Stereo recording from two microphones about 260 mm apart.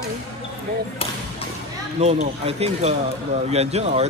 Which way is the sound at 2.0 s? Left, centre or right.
Right.